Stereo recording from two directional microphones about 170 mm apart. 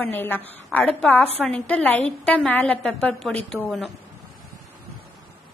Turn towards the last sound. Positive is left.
turn(degrees=0)  # may be behind; listen again after turning